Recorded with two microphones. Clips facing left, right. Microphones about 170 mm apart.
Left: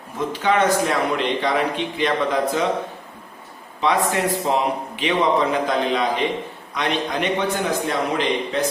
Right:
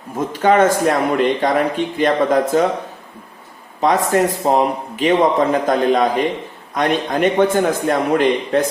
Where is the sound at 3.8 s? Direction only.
45° right (ahead or behind).